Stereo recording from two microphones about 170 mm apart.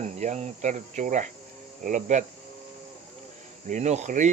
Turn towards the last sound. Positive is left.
turn(degrees=-45)  # may be behind; listen again after turning